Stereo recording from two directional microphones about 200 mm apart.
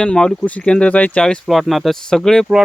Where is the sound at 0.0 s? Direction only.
5° left (ahead or behind).